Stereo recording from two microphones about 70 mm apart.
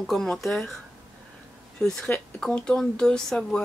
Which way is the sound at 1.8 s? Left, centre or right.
Centre.